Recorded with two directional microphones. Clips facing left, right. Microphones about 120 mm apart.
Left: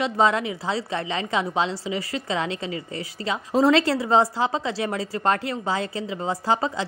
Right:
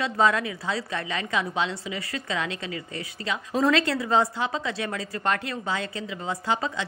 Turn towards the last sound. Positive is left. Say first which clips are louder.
# left 4 dB
turn(degrees=30)  # may be behind; listen again after turning